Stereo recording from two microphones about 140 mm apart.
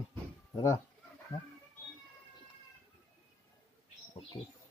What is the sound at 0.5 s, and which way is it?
Speech, 25° left (ahead or behind).